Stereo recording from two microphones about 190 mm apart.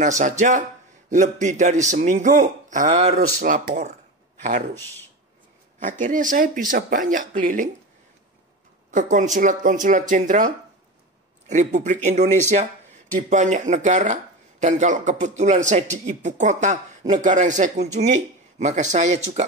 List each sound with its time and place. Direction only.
0.0 s speech: 40° right (ahead or behind)
5.8 s speech: 40° right (ahead or behind)
8.9 s speech: 40° right (ahead or behind)
11.7 s speech: 40° right (ahead or behind)